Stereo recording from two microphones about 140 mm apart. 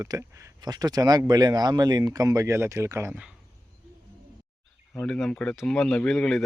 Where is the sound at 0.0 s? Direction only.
20° right (ahead or behind).